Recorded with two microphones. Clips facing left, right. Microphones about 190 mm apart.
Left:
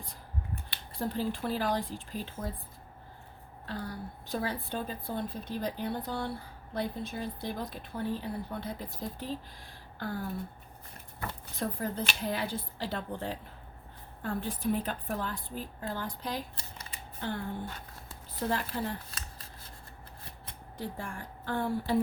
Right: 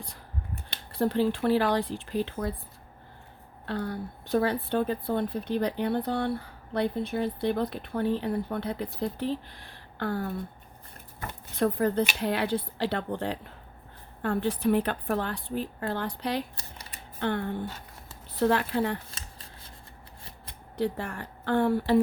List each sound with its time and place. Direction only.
0.9 s speech: 70° right (ahead or behind)
3.7 s a woman's voice: 65° right (ahead or behind)
11.5 s speech: 70° right (ahead or behind)
20.7 s speech: 70° right (ahead or behind)